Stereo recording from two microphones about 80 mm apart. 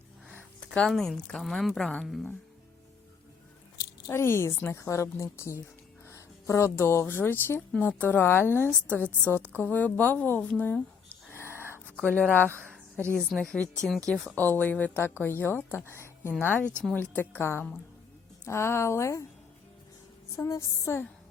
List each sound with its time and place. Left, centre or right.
0.3 s speech: centre
4.1 s a woman's voice: left
10.8 s a sound: centre
11.3 s a sound: left
11.9 s speech: centre
12.3 s a woman's voice: left
13.1 s speech: centre
14.3 s a woman's voice: left
20.3 s a woman's voice: left